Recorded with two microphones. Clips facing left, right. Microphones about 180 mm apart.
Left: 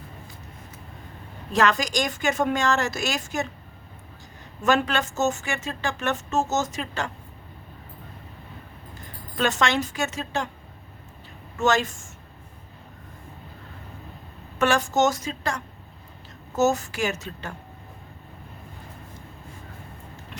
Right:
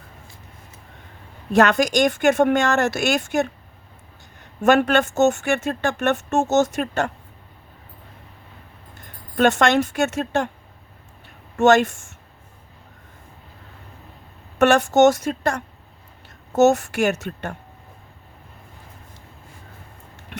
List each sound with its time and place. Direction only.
1.5 s a woman's voice: 60° right (ahead or behind)
4.6 s a woman's voice: 60° right (ahead or behind)
9.4 s a woman's voice: 55° right (ahead or behind)
11.6 s a woman's voice: 65° right (ahead or behind)
14.6 s a woman's voice: 65° right (ahead or behind)
16.6 s a woman's voice: 70° right (ahead or behind)